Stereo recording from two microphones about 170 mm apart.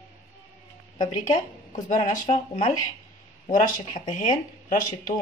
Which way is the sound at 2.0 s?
45° left (ahead or behind).